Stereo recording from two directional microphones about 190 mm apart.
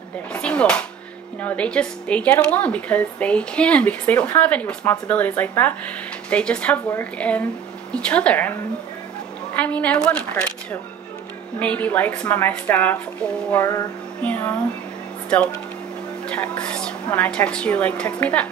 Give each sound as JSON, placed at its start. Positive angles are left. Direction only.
{"t": 0.3, "sound": "speech", "side_deg": 5}